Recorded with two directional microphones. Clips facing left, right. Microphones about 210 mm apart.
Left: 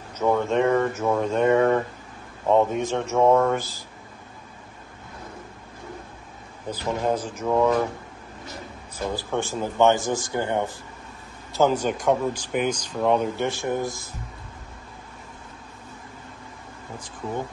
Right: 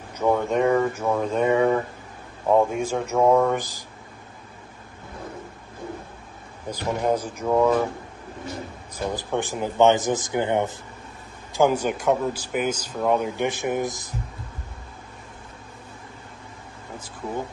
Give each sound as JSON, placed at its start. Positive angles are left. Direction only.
{"t": 0.2, "sound": "a man's voice", "side_deg": -5}
{"t": 6.9, "sound": "a man's voice", "side_deg": -10}
{"t": 8.9, "sound": "a man's voice", "side_deg": -15}